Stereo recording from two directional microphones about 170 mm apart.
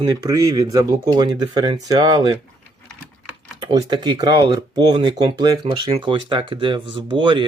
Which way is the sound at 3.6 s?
25° right (ahead or behind).